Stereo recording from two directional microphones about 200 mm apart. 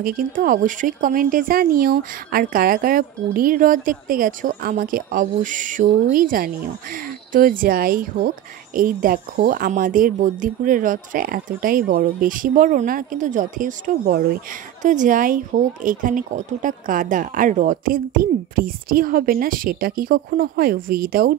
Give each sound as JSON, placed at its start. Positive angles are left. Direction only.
{"t": 0.0, "sound": "speech", "side_deg": -45}